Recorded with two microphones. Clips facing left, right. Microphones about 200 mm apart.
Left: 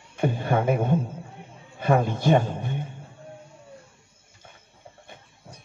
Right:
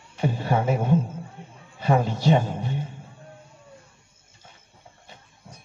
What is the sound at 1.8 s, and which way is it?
A man's voice, 55° left (ahead or behind).